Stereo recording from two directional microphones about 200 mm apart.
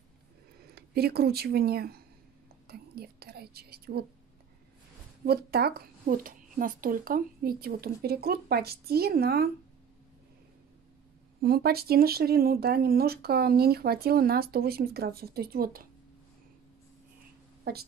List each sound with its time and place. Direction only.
0.7 s speech: 50° right (ahead or behind)
2.7 s whispering: 50° right (ahead or behind)
5.2 s speech: 50° right (ahead or behind)
11.4 s speech: 50° right (ahead or behind)
17.7 s speech: 50° right (ahead or behind)